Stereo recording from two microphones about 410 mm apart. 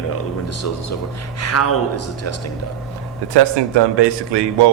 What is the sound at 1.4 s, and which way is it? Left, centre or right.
Speech, left.